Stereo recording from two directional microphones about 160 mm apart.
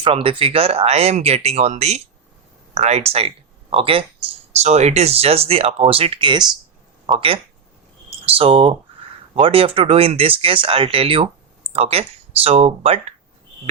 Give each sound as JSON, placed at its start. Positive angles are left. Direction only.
{"t": 0.0, "sound": "speech", "side_deg": -35}